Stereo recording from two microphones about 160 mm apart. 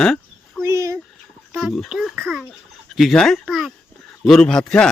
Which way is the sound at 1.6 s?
Centre (ahead or behind).